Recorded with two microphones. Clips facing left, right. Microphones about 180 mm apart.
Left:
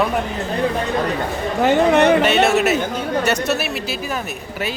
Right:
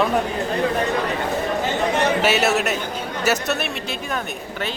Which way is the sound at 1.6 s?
60° left (ahead or behind).